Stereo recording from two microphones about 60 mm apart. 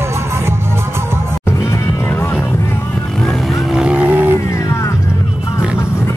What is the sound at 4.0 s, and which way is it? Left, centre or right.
Roaring cats, right.